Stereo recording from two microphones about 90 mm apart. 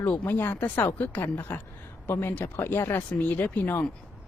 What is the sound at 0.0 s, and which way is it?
Speech, 20° left (ahead or behind).